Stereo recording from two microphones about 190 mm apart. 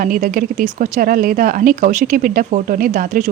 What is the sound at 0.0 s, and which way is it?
Speech, 45° right (ahead or behind).